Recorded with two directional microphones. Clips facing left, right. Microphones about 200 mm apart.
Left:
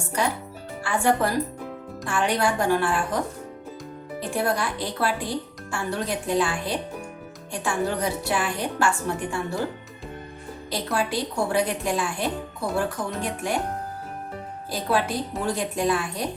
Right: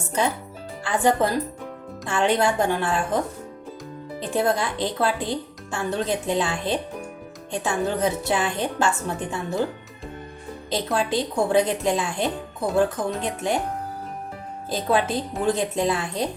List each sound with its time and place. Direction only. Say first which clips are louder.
0.9 s speech: right 2 dB; 20° right (ahead or behind)
4.2 s speech: right 3 dB; 20° right (ahead or behind)
10.7 s speech: right 3 dB; 20° right (ahead or behind)
14.7 s speech: right 2 dB; 20° right (ahead or behind)